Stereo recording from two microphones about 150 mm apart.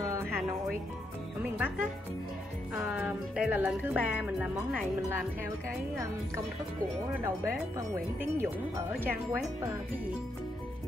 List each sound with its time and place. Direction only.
0.0 s music: 20° right (ahead or behind)
1.4 s speech: 10° right (ahead or behind)
2.8 s music: 10° right (ahead or behind)
7.2 s speech: 20° right (ahead or behind)